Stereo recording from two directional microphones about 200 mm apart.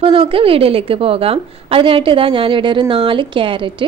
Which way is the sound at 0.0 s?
25° right (ahead or behind).